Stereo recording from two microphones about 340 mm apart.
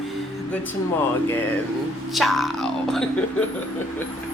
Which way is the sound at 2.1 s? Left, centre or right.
Centre.